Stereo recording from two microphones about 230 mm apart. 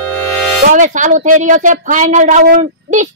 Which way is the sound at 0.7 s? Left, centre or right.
Right.